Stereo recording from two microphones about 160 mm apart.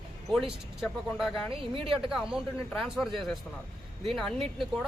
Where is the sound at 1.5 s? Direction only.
35° right (ahead or behind).